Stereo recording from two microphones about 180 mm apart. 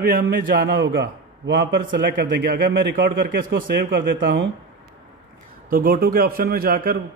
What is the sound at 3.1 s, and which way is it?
Speech, 90° right.